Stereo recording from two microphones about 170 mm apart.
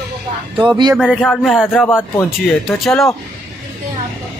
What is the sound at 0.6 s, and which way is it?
Speech, 25° right (ahead or behind).